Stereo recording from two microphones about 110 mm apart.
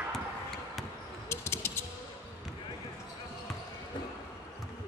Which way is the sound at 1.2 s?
25° left (ahead or behind).